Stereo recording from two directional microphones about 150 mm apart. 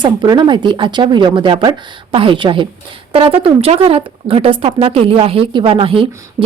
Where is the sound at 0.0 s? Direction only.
30° right (ahead or behind).